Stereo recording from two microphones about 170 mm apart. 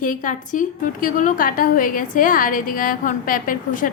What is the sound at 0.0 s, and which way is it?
A woman's voice, 50° left (ahead or behind).